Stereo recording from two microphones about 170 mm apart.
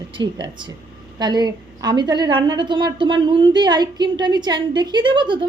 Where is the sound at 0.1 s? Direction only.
25° right (ahead or behind).